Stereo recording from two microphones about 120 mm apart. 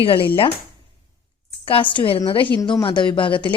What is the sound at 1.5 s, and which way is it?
Speech, 50° left (ahead or behind).